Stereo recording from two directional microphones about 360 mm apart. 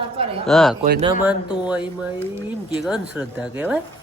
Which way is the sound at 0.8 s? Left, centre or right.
Right.